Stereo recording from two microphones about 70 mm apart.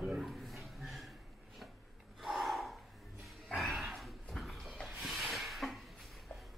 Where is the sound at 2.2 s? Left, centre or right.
Centre.